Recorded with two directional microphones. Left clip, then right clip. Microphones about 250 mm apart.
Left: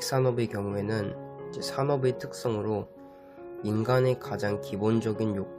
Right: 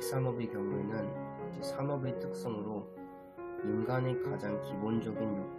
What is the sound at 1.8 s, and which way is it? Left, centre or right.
Speech, left.